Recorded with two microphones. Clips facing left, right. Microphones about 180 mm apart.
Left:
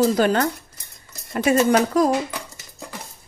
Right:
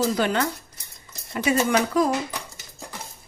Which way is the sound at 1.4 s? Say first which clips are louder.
Left 4 dB; 45° left (ahead or behind).